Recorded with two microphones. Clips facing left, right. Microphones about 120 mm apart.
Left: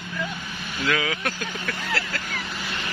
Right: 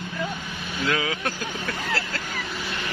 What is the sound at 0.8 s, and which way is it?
A man's voice, 30° right (ahead or behind).